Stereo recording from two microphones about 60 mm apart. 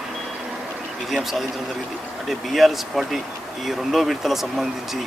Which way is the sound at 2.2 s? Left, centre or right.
Centre.